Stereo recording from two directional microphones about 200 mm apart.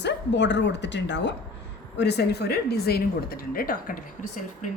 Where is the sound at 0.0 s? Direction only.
60° left (ahead or behind).